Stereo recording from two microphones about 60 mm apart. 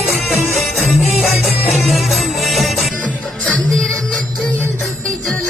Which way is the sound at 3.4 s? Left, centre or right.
Left.